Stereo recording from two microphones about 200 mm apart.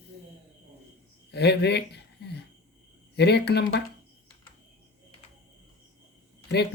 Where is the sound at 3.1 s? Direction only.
55° left (ahead or behind).